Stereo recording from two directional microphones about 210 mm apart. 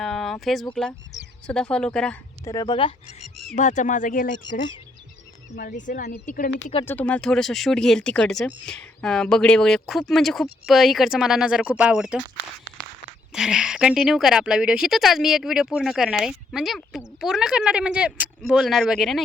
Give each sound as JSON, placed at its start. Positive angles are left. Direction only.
{"t": 0.0, "sound": "speech", "side_deg": 0}
{"t": 2.4, "sound": "speech", "side_deg": 15}
{"t": 3.5, "sound": "speech", "side_deg": 35}
{"t": 4.3, "sound": "speech", "side_deg": 55}
{"t": 5.5, "sound": "speech", "side_deg": 40}
{"t": 6.8, "sound": "speech", "side_deg": 5}
{"t": 13.3, "sound": "speech", "side_deg": -5}